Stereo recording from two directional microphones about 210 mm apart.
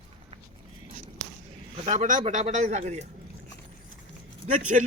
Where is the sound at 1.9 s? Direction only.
35° right (ahead or behind).